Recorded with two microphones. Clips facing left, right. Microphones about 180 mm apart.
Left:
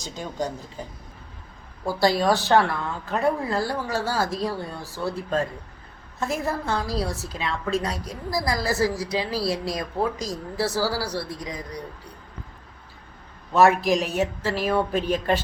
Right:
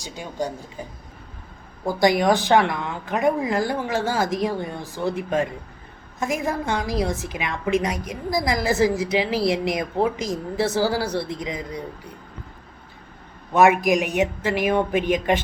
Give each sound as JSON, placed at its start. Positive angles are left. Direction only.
{"t": 0.0, "sound": "a woman's voice", "side_deg": -10}
{"t": 13.5, "sound": "a woman's voice", "side_deg": -15}